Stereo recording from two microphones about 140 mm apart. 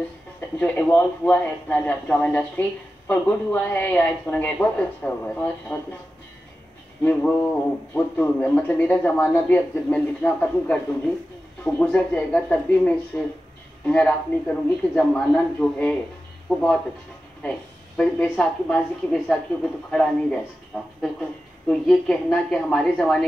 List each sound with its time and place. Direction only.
0.6 s a man's voice: 15° left (ahead or behind)
7.0 s a man's voice: 10° left (ahead or behind)
16.5 s speech: centre (ahead or behind)
17.4 s a woman's voice: 10° left (ahead or behind)